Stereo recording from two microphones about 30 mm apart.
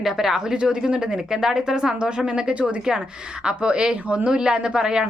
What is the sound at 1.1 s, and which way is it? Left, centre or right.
A woman's voice, centre.